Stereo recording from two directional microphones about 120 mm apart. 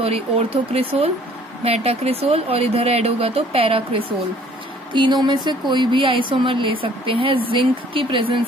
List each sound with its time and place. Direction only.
0.0 s speech: 55° right (ahead or behind)